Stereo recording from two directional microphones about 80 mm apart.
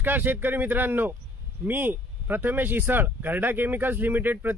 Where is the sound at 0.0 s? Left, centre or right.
Right.